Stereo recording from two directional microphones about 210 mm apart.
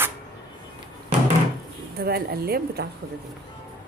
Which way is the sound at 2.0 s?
45° right (ahead or behind).